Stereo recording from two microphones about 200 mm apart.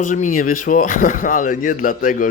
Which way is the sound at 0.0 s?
40° left (ahead or behind).